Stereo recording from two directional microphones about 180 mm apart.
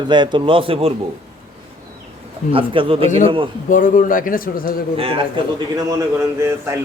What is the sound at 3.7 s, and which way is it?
A man's voice, 45° left (ahead or behind).